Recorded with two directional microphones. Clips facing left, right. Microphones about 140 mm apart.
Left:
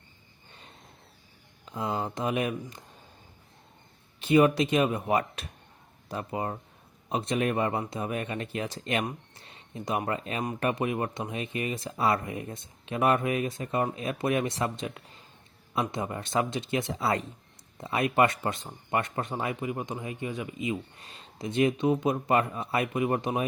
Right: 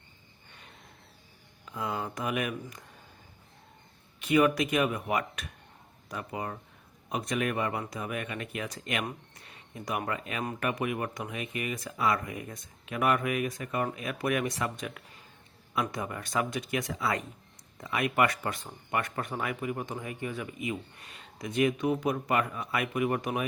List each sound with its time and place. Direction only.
1.6 s speech: 30° left (ahead or behind)
4.2 s speech: 25° left (ahead or behind)